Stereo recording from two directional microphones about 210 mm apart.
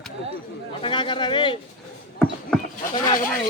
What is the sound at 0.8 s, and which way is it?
Speech, 25° left (ahead or behind).